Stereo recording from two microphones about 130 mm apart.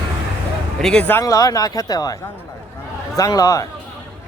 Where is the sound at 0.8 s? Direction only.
5° left (ahead or behind).